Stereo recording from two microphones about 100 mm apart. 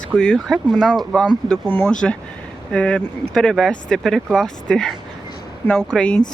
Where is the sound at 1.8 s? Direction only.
10° left (ahead or behind).